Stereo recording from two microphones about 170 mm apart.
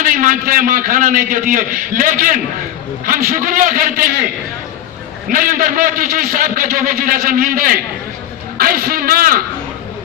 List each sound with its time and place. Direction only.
0.0 s a man's voice: 50° right (ahead or behind)
5.3 s a man's voice: 55° right (ahead or behind)